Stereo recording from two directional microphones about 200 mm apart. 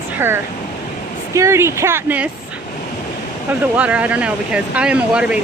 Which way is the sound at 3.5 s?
5° right (ahead or behind).